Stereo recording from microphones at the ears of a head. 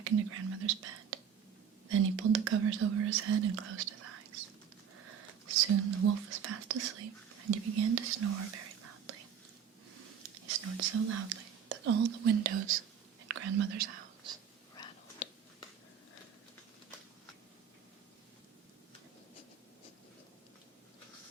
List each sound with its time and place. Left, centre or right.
0.0 s whispering: right
1.9 s speech: right
13.2 s whispering: right